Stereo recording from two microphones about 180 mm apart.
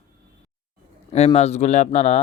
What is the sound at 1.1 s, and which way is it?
Speech, 35° left (ahead or behind).